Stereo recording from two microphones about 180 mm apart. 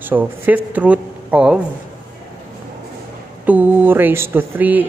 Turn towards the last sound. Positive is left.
turn(degrees=-10)  # may be behind; listen again after turning